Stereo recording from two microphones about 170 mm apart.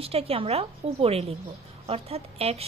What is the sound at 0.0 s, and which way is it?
A woman's voice, 35° right (ahead or behind).